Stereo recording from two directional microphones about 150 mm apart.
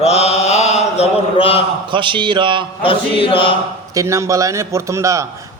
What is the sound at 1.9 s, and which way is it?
Speech, 35° right (ahead or behind).